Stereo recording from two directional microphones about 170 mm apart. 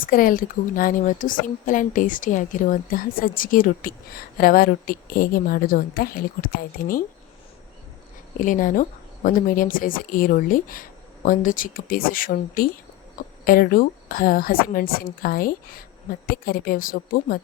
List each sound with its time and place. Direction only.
0.0 s speech: 55° left (ahead or behind)
8.4 s speech: 50° left (ahead or behind)